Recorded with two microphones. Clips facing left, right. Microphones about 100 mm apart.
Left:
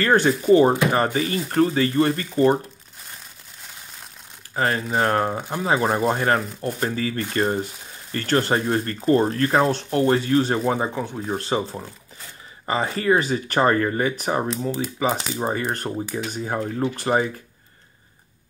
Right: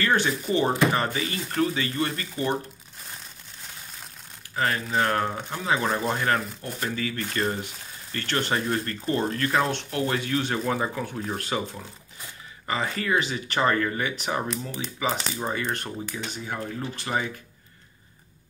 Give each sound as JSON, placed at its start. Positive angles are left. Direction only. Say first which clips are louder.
{"t": 0.0, "sound": "speech", "louder": "left 6 dB", "side_deg": 45}
{"t": 4.6, "sound": "speech", "louder": "left 3 dB", "side_deg": 35}